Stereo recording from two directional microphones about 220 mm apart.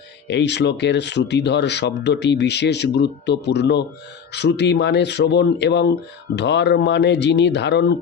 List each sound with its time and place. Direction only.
0.3 s speech: 50° left (ahead or behind)